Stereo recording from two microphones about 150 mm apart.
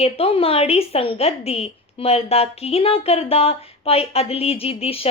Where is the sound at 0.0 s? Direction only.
40° left (ahead or behind).